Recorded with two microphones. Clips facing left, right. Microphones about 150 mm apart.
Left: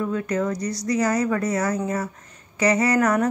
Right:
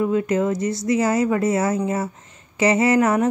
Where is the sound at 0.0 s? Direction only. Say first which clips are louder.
Right 4 dB; 20° right (ahead or behind).